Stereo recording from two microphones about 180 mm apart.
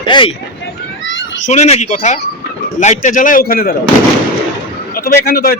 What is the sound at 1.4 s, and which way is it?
A man's voice, 40° left (ahead or behind).